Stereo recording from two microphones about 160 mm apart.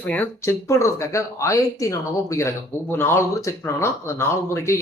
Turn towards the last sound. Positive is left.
turn(degrees=15)  # may be behind; listen again after turning